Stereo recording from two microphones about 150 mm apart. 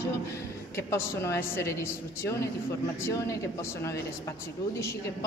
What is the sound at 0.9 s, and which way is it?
Speech, 20° left (ahead or behind).